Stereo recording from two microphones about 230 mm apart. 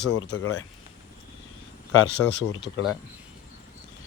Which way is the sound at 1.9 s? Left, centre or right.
Left.